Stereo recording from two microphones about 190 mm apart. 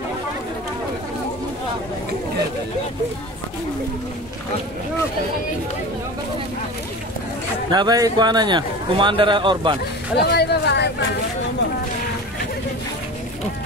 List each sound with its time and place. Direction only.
7.7 s a man's voice: 20° right (ahead or behind)
10.1 s speech: 60° left (ahead or behind)